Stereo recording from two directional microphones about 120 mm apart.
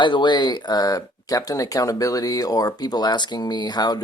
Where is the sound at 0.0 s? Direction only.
40° left (ahead or behind).